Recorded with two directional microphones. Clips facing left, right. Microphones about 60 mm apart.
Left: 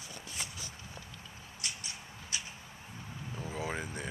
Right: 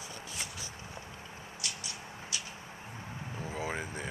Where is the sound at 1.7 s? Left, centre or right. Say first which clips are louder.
Even; left.